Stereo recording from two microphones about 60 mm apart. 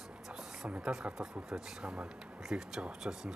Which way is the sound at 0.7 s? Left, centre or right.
Centre.